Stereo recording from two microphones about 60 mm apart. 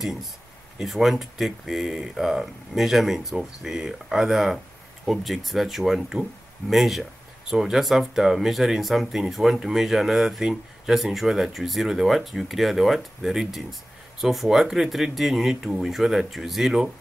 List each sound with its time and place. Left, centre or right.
0.7 s speech: centre